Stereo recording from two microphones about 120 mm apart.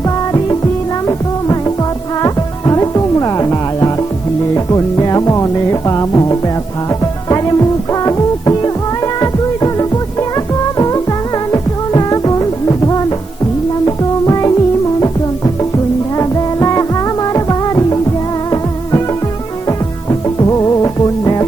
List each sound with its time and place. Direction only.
0.0 s music: 30° left (ahead or behind)